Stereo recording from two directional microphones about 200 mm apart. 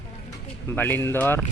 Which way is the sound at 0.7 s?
10° left (ahead or behind).